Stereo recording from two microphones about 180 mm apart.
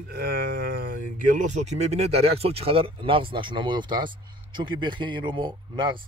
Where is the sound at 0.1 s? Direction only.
60° right (ahead or behind).